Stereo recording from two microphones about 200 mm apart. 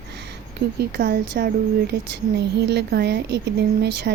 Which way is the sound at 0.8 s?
55° right (ahead or behind).